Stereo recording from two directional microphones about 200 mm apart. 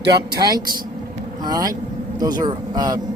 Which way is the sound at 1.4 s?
20° right (ahead or behind).